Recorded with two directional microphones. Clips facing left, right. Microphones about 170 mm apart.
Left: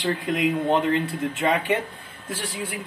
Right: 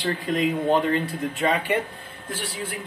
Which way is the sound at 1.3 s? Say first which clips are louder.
Even; 25° left (ahead or behind).